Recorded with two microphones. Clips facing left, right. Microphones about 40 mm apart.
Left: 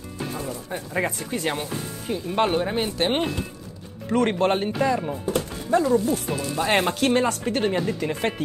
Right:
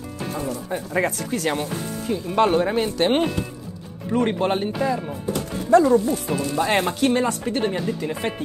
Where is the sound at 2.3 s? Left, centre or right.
Centre.